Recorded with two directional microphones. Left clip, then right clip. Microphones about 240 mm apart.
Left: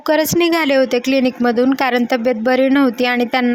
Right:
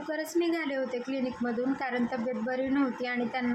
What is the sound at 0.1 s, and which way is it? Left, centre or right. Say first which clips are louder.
A woman's voice: left 16 dB; left.